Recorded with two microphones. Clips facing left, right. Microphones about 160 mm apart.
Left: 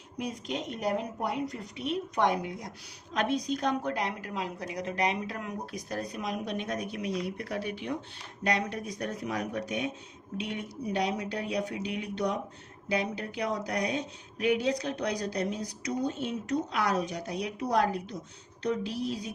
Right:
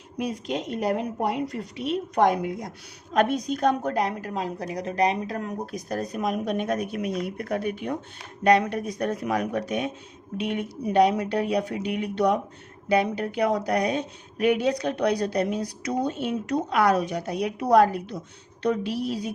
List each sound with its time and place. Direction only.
0.2 s speech: 60° right (ahead or behind)
2.2 s a woman's voice: 50° right (ahead or behind)